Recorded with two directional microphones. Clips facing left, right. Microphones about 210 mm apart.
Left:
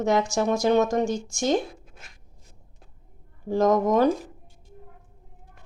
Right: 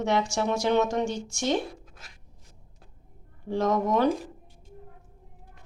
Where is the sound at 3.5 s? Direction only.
45° left (ahead or behind).